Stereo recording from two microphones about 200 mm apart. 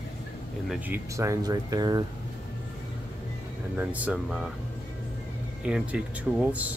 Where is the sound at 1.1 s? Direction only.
15° right (ahead or behind).